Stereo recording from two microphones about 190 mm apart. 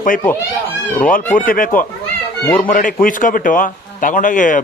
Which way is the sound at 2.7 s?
45° left (ahead or behind).